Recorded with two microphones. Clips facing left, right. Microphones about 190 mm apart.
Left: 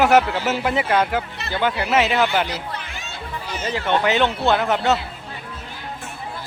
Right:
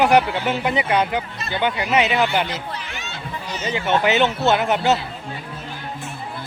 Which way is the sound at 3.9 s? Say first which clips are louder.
Right 1 dB; 5° right (ahead or behind).